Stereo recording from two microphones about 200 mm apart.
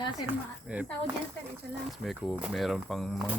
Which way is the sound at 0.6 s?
5° right (ahead or behind).